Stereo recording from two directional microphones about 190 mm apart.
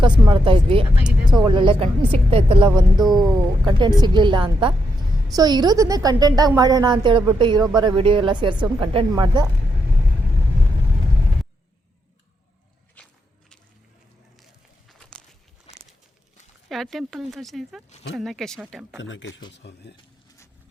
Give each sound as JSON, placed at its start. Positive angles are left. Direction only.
{"t": 0.0, "sound": "a woman's voice", "side_deg": -25}
{"t": 13.0, "sound": "walk", "side_deg": 10}
{"t": 14.8, "sound": "a sound", "side_deg": 5}
{"t": 16.6, "sound": "speech", "side_deg": 0}
{"t": 18.9, "sound": "speech", "side_deg": 80}
{"t": 19.6, "sound": "speech", "side_deg": 60}